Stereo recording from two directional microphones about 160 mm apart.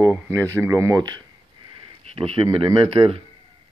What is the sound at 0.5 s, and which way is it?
Speech, 15° right (ahead or behind).